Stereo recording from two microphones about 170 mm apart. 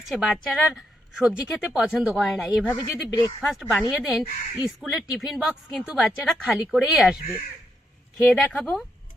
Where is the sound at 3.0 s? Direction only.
20° left (ahead or behind).